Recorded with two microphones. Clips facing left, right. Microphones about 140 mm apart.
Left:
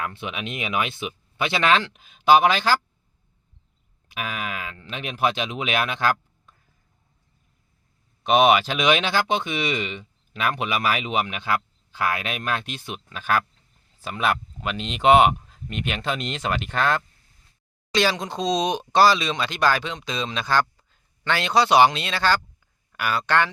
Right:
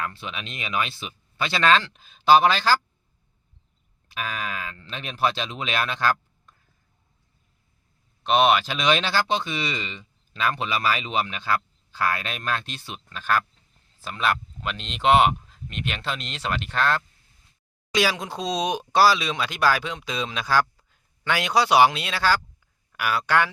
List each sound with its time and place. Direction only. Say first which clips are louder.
0.0 s speech: left 2 dB; 15° left (ahead or behind)
4.1 s speech: left 1 dB; 15° left (ahead or behind)
8.2 s speech: left 2 dB; 10° left (ahead or behind)
17.9 s speech: left 1 dB; 10° right (ahead or behind)